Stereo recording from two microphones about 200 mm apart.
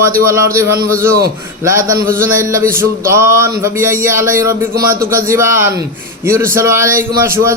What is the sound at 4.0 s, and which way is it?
Speech, 15° right (ahead or behind).